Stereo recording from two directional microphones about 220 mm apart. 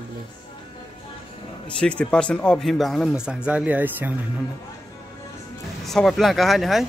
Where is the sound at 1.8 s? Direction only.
5° left (ahead or behind).